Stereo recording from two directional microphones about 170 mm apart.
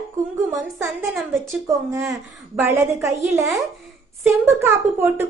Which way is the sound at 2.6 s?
15° right (ahead or behind).